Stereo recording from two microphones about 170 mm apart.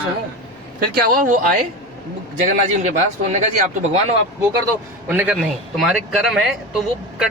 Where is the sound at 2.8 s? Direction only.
45° right (ahead or behind).